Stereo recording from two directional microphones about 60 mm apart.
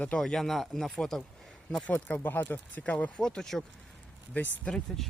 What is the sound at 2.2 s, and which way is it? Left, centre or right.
Speech, left.